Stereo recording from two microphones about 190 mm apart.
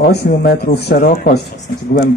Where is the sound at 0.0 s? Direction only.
60° left (ahead or behind).